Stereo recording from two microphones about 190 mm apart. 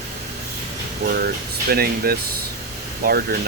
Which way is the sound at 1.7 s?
55° right (ahead or behind).